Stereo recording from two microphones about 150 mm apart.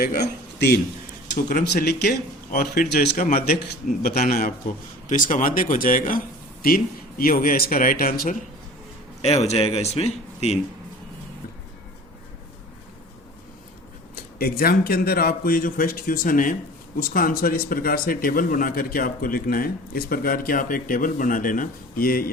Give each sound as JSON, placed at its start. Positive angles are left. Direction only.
{"t": 0.2, "sound": "a man's voice", "side_deg": 90}
{"t": 4.7, "sound": "speech", "side_deg": 65}
{"t": 9.2, "sound": "speech", "side_deg": 45}
{"t": 14.2, "sound": "speech", "side_deg": 85}